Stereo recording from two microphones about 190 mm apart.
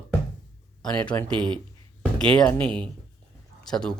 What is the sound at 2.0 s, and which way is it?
Speech, 5° left (ahead or behind).